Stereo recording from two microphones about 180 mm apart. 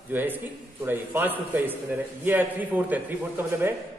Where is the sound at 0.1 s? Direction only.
10° right (ahead or behind).